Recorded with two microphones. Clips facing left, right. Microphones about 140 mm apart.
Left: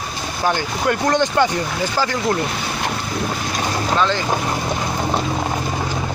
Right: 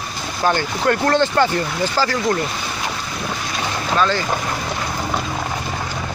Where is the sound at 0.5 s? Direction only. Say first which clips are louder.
Right 2 dB; 15° left (ahead or behind).